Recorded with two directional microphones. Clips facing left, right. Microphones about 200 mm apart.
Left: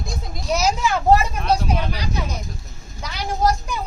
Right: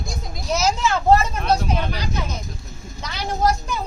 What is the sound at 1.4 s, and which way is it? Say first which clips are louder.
Vehicle: even; centre (ahead or behind).